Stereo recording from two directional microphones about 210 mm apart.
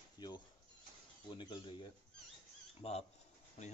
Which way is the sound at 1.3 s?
20° left (ahead or behind).